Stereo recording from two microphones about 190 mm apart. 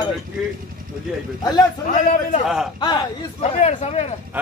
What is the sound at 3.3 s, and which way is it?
Speech, 35° left (ahead or behind).